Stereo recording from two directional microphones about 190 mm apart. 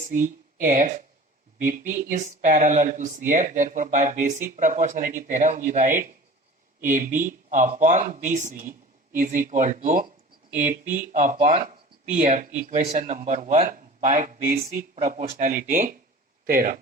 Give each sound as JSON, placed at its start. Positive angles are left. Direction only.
{"t": 0.0, "sound": "speech", "side_deg": -45}
{"t": 2.0, "sound": "speech", "side_deg": -45}